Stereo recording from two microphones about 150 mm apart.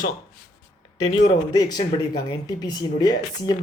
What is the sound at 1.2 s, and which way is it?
Speech, 25° left (ahead or behind).